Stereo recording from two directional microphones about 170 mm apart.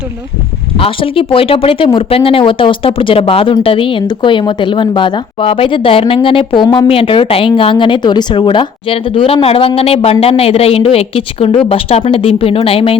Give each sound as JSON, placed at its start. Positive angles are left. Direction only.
{"t": 0.8, "sound": "a woman's voice", "side_deg": 30}